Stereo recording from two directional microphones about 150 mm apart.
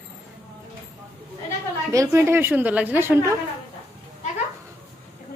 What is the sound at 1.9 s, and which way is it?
A woman's voice, 20° right (ahead or behind).